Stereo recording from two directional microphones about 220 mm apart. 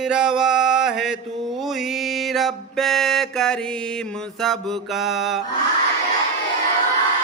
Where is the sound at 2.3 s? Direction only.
Centre (ahead or behind).